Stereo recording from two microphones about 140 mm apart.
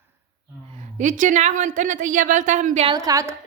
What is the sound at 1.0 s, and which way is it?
A woman's voice, 65° right (ahead or behind).